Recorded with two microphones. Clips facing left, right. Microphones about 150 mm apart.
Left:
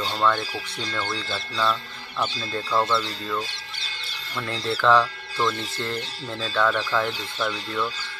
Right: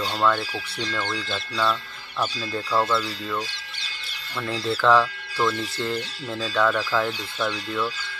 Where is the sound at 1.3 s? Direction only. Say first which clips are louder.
Even; centre (ahead or behind).